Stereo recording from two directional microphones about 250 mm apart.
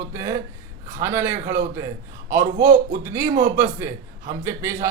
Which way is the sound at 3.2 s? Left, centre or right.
Right.